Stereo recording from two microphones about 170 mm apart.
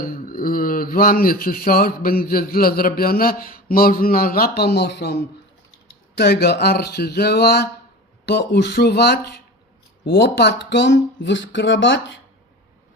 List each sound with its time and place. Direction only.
0.0 s a man's voice: 55° left (ahead or behind); by 12.2 s 90° left